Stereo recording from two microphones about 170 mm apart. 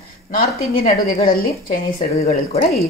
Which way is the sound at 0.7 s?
55° left (ahead or behind).